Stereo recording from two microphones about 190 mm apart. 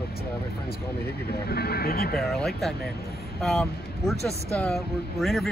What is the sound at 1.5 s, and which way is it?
Speech, 55° left (ahead or behind).